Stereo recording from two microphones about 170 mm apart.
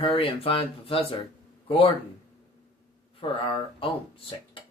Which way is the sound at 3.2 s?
30° left (ahead or behind).